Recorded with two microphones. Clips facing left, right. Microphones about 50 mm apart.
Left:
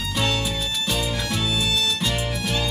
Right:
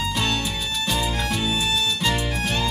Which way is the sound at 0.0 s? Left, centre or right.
Centre.